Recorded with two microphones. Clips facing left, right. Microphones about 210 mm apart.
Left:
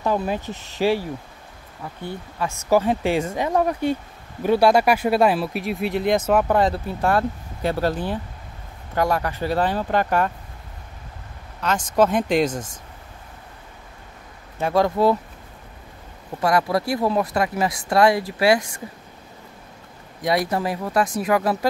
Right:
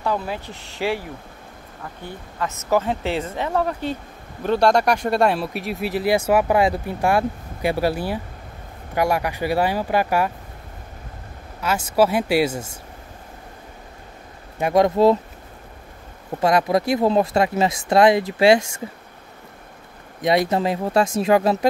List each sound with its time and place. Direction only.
0.0 s speech: 20° left (ahead or behind)
0.7 s speech: 15° right (ahead or behind)
2.3 s speech: 15° left (ahead or behind); by 10.3 s 10° right (ahead or behind)
11.6 s speech: 10° right (ahead or behind)
14.6 s speech: 20° right (ahead or behind)
16.3 s speech: 20° right (ahead or behind)
20.2 s speech: 20° right (ahead or behind)